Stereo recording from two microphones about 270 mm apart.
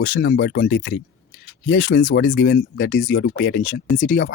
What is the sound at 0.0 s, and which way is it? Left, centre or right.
Speech, left.